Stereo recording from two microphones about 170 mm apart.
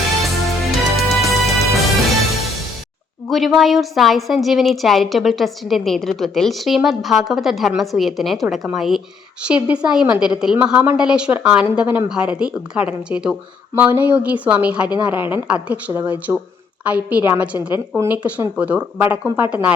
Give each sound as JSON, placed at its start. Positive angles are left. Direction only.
{"t": 0.2, "sound": "music", "side_deg": 0}
{"t": 3.2, "sound": "a woman's voice", "side_deg": 0}